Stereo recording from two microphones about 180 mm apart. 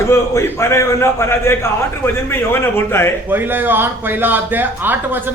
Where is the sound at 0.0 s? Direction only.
15° left (ahead or behind).